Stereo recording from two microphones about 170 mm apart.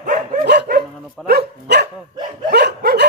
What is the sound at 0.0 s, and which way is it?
Dog, 50° right (ahead or behind).